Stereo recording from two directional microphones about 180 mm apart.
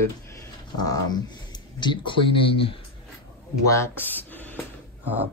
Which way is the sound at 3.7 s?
15° left (ahead or behind).